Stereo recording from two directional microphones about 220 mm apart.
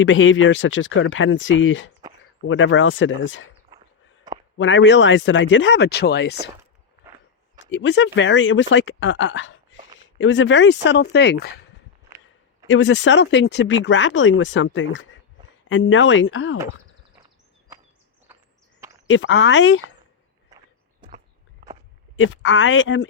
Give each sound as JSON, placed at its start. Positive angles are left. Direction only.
{"t": 0.0, "sound": "speech", "side_deg": 60}
{"t": 4.5, "sound": "speech", "side_deg": 60}
{"t": 7.7, "sound": "speech", "side_deg": 55}
{"t": 12.6, "sound": "speech", "side_deg": 55}
{"t": 18.3, "sound": "a sound", "side_deg": -10}
{"t": 19.0, "sound": "speech", "side_deg": 60}
{"t": 22.1, "sound": "speech", "side_deg": 60}